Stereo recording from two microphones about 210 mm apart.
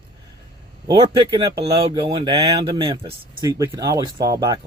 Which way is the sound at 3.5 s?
15° right (ahead or behind).